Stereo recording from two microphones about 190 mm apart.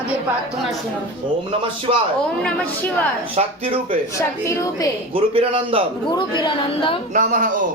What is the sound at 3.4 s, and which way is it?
Speech, 30° right (ahead or behind).